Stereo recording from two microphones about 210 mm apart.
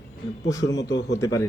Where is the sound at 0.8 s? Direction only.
55° left (ahead or behind).